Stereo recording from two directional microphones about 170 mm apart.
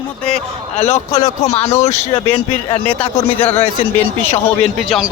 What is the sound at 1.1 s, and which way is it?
Speech, 20° left (ahead or behind).